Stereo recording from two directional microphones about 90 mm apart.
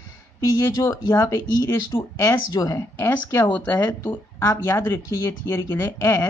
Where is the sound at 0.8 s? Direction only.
35° left (ahead or behind).